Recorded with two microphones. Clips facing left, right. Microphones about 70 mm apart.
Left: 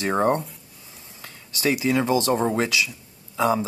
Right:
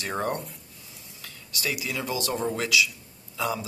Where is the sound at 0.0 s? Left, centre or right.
Left.